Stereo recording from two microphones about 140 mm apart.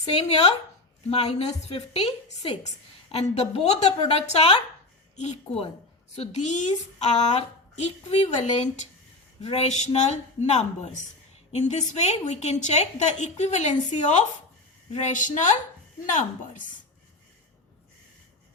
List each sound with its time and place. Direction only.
0.2 s a woman's voice: 45° left (ahead or behind)
9.4 s a woman's voice: 50° left (ahead or behind)